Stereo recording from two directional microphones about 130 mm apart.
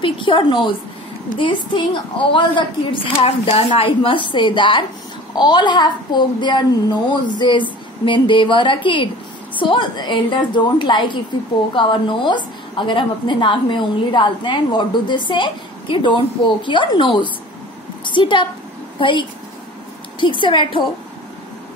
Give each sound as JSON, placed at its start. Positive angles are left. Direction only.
{"t": 0.0, "sound": "a woman's voice", "side_deg": 40}
{"t": 3.2, "sound": "a woman's voice", "side_deg": 50}